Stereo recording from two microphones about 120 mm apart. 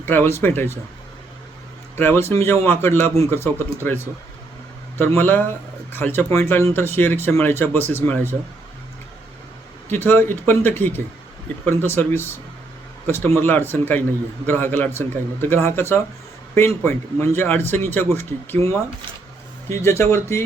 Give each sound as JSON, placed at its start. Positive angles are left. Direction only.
{"t": 0.0, "sound": "a man's voice", "side_deg": 15}
{"t": 2.0, "sound": "a man's voice", "side_deg": 20}
{"t": 9.9, "sound": "a man's voice", "side_deg": 20}